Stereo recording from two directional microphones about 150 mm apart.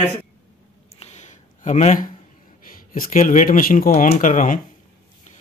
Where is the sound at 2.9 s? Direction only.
65° left (ahead or behind).